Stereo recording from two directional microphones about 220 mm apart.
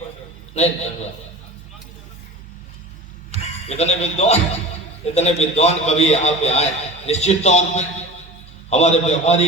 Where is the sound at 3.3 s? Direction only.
30° right (ahead or behind).